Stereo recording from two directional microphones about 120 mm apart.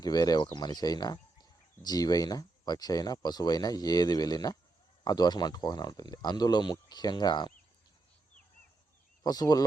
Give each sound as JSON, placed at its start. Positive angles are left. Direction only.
{"t": 0.0, "sound": "speech", "side_deg": 35}
{"t": 9.2, "sound": "speech", "side_deg": 30}